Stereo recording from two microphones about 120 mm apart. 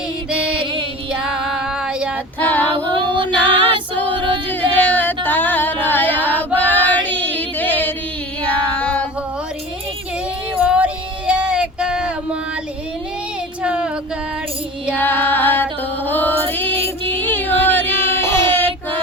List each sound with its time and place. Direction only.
0.5 s music: 45° right (ahead or behind)
1.1 s female singing: 5° right (ahead or behind)
2.4 s female singing: 15° left (ahead or behind)
2.8 s female singing: 40° right (ahead or behind)
4.4 s music: 15° left (ahead or behind)
8.4 s child singing: 10° left (ahead or behind)
10.6 s female singing: 10° right (ahead or behind)
13.6 s a sound: 10° right (ahead or behind)
14.9 s music: 15° left (ahead or behind)
17.2 s female singing: 15° left (ahead or behind)